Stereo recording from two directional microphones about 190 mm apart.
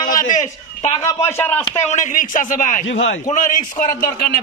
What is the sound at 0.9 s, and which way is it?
Speech, 15° left (ahead or behind).